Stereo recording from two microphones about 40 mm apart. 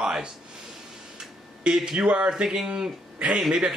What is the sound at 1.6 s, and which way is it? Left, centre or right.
Speech, centre.